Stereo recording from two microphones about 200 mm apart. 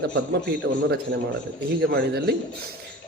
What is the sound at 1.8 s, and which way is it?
Speech, 50° right (ahead or behind).